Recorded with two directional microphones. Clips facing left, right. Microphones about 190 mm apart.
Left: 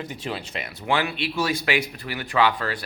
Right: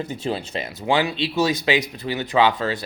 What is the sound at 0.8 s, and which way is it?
A man's voice, 20° right (ahead or behind).